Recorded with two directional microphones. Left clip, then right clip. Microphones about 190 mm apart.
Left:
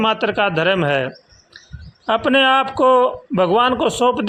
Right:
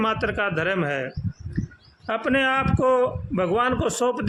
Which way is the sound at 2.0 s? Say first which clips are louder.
Left 8 dB; 20° left (ahead or behind).